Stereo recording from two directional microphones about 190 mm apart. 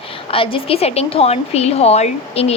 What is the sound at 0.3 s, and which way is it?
A woman's voice, 30° left (ahead or behind).